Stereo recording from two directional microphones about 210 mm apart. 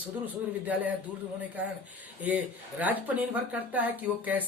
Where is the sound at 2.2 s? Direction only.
5° right (ahead or behind).